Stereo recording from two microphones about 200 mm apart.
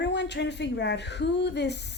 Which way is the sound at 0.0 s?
60° left (ahead or behind).